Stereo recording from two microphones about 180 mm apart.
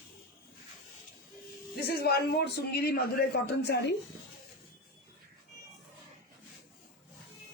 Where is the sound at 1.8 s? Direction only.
60° left (ahead or behind).